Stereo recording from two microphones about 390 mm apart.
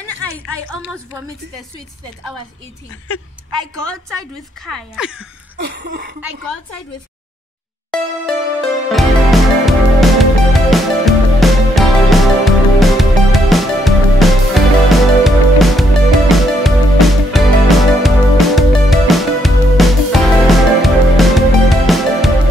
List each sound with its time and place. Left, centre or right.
0.7 s speech: centre
4.6 s speech: centre
5.6 s a sound: right
7.9 s music: centre